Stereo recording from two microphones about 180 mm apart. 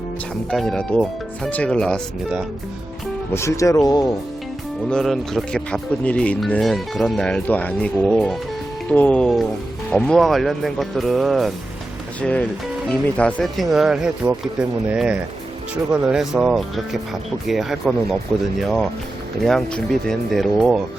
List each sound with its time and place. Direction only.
0.5 s speech: centre (ahead or behind)
3.3 s speech: 15° left (ahead or behind)
4.9 s speech: centre (ahead or behind)
19.4 s speech: centre (ahead or behind)